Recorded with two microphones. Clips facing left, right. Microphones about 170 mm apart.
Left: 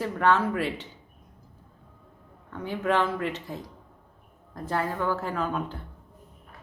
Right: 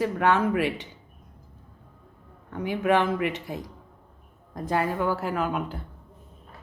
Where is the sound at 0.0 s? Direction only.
15° right (ahead or behind).